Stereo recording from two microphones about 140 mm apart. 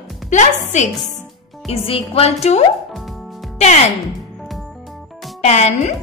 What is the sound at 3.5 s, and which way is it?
Music, 55° left (ahead or behind).